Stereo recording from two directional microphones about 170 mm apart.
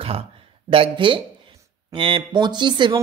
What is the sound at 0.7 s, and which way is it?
Speech, 30° right (ahead or behind).